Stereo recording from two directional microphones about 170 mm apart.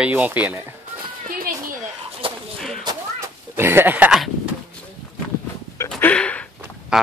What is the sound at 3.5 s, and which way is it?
Speech, 15° right (ahead or behind).